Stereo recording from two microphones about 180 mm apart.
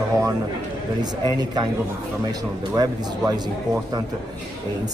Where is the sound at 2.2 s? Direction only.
20° right (ahead or behind).